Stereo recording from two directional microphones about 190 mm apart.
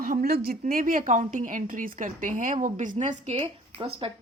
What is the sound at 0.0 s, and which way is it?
A woman's voice, 50° right (ahead or behind).